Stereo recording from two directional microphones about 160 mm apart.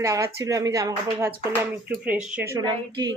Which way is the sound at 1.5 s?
10° right (ahead or behind).